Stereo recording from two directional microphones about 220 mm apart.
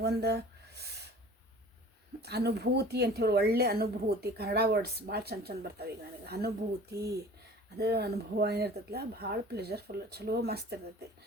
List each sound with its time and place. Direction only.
0.0 s a sound: 45° right (ahead or behind)
2.2 s speech: 50° right (ahead or behind)
7.8 s speech: 45° right (ahead or behind)